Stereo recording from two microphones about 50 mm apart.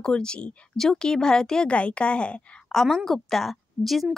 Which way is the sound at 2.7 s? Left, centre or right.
Centre.